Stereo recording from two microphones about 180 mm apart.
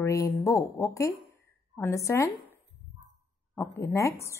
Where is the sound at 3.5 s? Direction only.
15° left (ahead or behind).